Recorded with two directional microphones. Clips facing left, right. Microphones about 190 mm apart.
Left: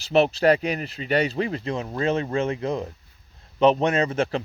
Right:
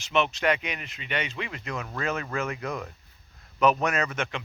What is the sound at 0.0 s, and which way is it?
Speech, 35° left (ahead or behind).